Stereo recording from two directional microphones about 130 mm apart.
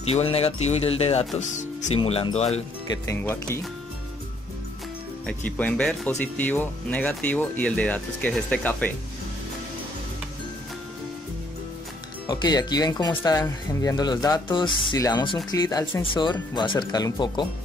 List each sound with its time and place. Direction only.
0.0 s speech: 50° left (ahead or behind)
1.4 s speech: 65° left (ahead or behind)
2.3 s speech: 55° left (ahead or behind)
3.1 s speech: 20° left (ahead or behind)
5.2 s speech: 10° left (ahead or behind)
12.3 s speech: 30° left (ahead or behind)